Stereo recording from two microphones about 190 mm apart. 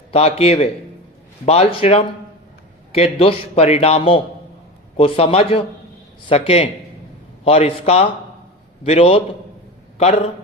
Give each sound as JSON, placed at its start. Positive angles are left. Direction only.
{"t": 0.1, "sound": "a man's voice", "side_deg": 30}